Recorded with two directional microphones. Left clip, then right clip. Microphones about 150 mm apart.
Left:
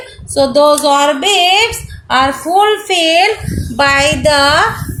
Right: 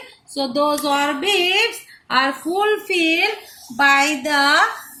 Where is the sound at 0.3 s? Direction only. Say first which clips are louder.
Left 11 dB; 50° left (ahead or behind).